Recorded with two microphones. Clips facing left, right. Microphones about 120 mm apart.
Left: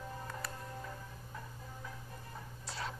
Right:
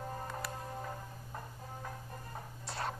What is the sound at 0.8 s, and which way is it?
Music, 45° right (ahead or behind).